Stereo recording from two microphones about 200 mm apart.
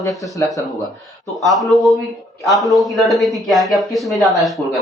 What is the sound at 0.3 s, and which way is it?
Speech, 15° left (ahead or behind).